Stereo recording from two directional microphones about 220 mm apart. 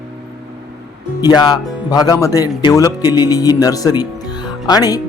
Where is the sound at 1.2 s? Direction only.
20° left (ahead or behind).